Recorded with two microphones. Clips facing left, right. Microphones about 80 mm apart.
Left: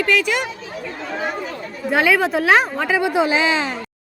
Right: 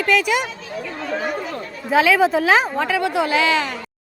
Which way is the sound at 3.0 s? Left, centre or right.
Centre.